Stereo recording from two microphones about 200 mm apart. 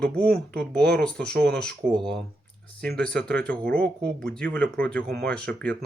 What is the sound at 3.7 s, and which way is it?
Speech, 50° right (ahead or behind).